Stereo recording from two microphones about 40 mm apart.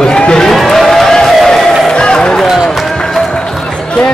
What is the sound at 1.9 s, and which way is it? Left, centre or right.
Run, left.